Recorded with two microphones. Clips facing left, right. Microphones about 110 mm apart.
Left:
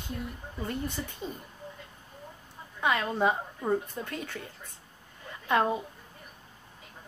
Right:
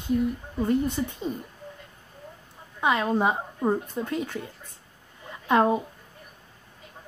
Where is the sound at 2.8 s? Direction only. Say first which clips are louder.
Right 3 dB; 25° right (ahead or behind).